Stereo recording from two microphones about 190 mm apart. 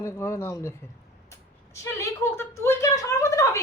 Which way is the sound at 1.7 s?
15° left (ahead or behind).